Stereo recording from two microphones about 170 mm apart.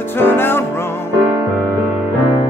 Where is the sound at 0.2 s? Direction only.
15° left (ahead or behind).